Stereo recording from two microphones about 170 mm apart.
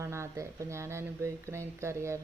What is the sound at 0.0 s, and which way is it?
Speech, 15° right (ahead or behind).